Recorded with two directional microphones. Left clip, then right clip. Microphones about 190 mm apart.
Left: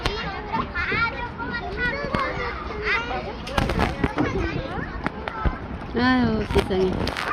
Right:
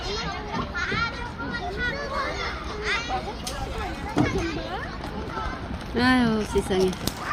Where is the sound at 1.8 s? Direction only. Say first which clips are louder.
Left 4 dB; 85° right.